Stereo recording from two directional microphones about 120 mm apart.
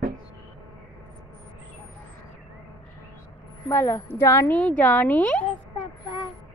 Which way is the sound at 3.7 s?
20° left (ahead or behind).